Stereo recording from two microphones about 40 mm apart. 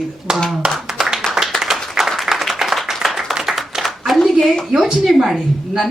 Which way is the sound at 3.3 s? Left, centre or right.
Centre.